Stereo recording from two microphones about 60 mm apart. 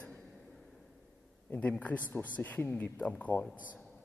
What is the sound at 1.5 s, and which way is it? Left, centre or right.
Speech, left.